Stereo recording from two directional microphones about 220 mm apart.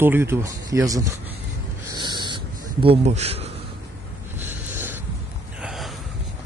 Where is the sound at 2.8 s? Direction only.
30° right (ahead or behind).